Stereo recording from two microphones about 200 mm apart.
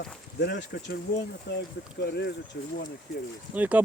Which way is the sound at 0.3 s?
55° left (ahead or behind).